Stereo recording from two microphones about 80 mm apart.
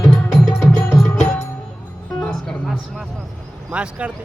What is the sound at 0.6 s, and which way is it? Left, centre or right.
Music, centre.